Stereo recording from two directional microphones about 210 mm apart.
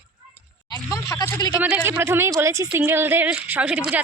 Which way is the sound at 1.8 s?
10° right (ahead or behind).